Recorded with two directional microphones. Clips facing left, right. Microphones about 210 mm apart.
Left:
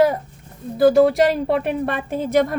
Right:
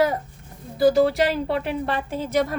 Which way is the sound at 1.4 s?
55° left (ahead or behind).